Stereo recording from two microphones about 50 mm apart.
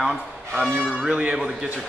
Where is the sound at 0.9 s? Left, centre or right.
Right.